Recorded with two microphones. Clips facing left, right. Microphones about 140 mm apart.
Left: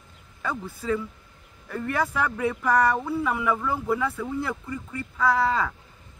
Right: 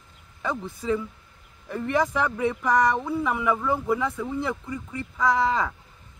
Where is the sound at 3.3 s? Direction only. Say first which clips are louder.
Right 1 dB; 5° right (ahead or behind).